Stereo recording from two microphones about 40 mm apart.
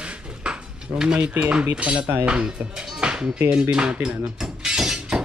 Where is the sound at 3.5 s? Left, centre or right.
Centre.